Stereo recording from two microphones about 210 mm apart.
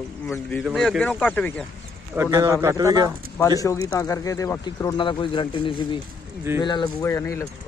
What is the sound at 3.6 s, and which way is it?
Speech, 15° left (ahead or behind).